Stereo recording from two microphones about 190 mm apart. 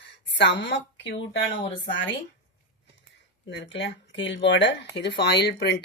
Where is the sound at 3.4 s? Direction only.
70° left (ahead or behind).